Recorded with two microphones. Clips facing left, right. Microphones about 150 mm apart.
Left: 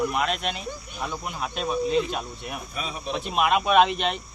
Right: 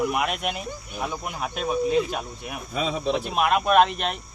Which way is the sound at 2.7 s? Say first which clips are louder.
Right 10 dB; 90° right.